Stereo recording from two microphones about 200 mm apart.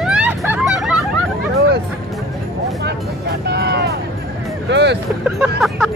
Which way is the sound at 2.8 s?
55° right (ahead or behind).